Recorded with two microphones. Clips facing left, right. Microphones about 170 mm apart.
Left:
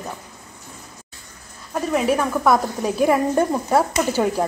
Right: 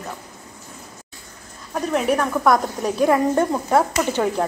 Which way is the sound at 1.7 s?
5° left (ahead or behind).